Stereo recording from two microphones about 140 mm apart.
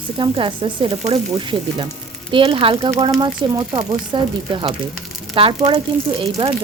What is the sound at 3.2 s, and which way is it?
Speech, 40° right (ahead or behind).